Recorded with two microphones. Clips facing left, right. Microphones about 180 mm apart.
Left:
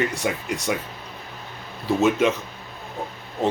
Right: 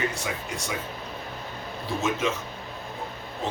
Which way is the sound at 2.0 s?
65° left (ahead or behind).